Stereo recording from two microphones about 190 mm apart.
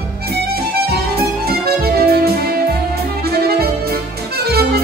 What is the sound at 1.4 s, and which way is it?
Music, 55° right (ahead or behind).